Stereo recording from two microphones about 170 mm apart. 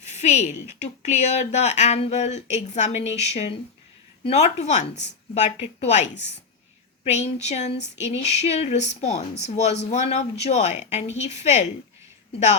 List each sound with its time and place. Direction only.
0.0 s a woman's voice: 45° left (ahead or behind)